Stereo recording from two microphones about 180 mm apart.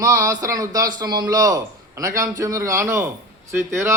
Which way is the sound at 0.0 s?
15° right (ahead or behind).